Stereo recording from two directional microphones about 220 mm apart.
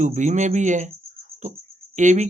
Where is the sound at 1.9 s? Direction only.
35° right (ahead or behind).